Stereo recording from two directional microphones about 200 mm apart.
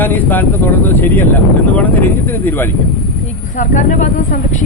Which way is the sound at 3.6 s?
40° left (ahead or behind).